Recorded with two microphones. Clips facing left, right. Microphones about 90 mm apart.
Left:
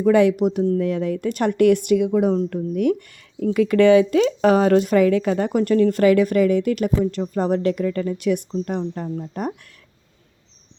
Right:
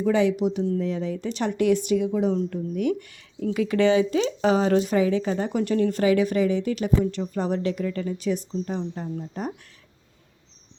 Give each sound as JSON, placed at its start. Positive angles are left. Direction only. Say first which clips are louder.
{"t": 0.0, "sound": "speech", "louder": "left 5 dB", "side_deg": 55}